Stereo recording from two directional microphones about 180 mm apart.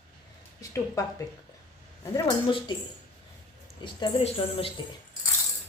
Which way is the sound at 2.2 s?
25° left (ahead or behind).